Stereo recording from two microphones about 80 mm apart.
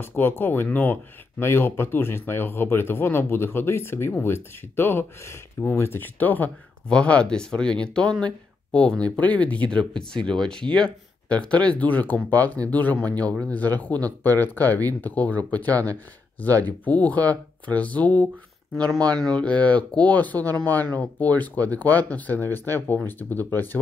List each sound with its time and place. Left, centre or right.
0.0 s speech: left